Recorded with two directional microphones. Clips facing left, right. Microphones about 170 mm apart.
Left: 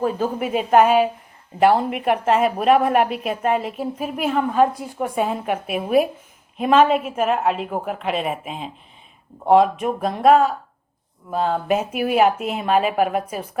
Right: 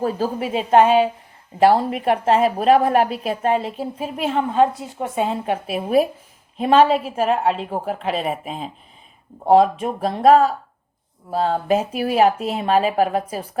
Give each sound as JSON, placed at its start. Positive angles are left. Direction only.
{"t": 0.0, "sound": "a woman's voice", "side_deg": -35}